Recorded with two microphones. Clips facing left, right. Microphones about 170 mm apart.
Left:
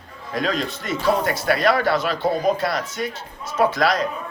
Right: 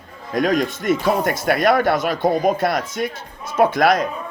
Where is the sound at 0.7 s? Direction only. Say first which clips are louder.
Right 3 dB; 50° right (ahead or behind).